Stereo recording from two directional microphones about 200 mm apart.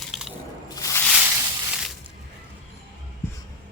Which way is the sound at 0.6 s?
15° left (ahead or behind).